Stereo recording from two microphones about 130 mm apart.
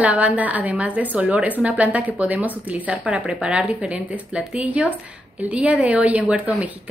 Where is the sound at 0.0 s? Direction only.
10° right (ahead or behind).